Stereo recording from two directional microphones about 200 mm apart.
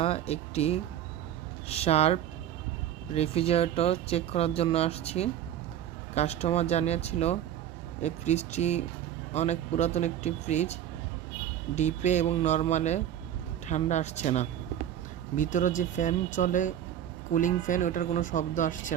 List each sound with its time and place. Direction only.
0.0 s speech: 30° left (ahead or behind)